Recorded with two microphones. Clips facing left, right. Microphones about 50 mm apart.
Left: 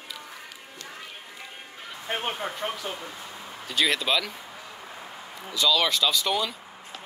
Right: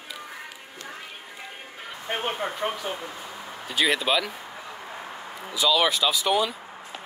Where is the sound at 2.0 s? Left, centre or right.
Centre.